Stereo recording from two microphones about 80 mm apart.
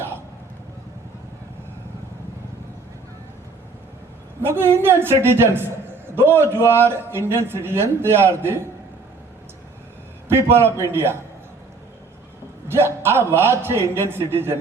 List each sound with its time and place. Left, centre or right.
4.4 s a man's voice: right
10.2 s a man's voice: right
12.6 s a man's voice: right